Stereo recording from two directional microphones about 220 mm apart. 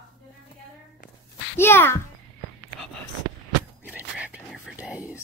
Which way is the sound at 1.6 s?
10° left (ahead or behind).